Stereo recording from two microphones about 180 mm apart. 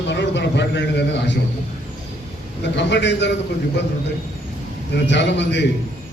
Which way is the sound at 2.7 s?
75° left (ahead or behind).